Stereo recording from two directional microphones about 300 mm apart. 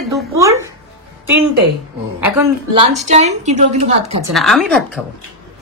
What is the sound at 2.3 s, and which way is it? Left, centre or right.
Speech, centre.